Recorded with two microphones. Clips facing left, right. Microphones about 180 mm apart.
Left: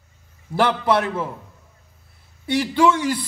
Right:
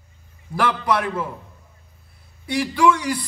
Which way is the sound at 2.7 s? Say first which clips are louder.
Even; 25° left (ahead or behind).